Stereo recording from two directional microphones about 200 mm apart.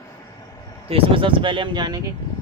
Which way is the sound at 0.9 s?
25° right (ahead or behind).